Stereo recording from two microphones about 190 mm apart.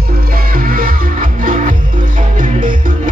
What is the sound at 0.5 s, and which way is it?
Music, 50° right (ahead or behind).